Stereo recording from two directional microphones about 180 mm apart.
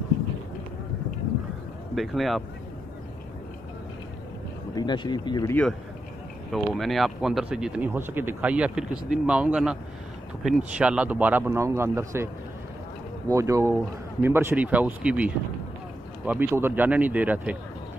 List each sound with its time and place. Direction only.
2.0 s speech: centre (ahead or behind)
4.7 s speech: 25° left (ahead or behind)
5.5 s a man's voice: 5° left (ahead or behind)
10.8 s a man's voice: 5° right (ahead or behind)
13.3 s a man's voice: 15° right (ahead or behind)